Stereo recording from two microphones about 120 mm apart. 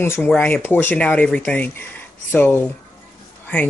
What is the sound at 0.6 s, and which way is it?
Speech, 15° left (ahead or behind).